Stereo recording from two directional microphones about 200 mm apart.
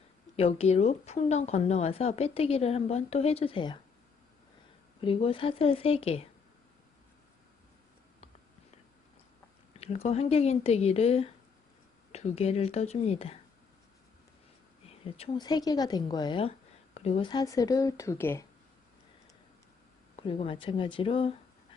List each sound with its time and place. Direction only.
0.3 s speech: 30° left (ahead or behind)
4.9 s a woman's voice: 25° left (ahead or behind)
9.7 s speech: 30° left (ahead or behind)
14.8 s a woman's voice: 30° left (ahead or behind); by 18.4 s 10° left (ahead or behind)
20.1 s a woman's voice: 25° left (ahead or behind)